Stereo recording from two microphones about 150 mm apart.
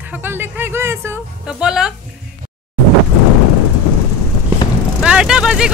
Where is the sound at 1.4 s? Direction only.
5° right (ahead or behind).